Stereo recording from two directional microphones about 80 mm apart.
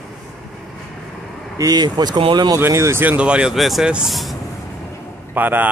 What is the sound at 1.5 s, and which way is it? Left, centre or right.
Speech, right.